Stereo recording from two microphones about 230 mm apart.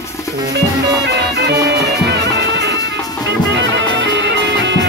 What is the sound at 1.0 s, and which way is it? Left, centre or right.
Music, right.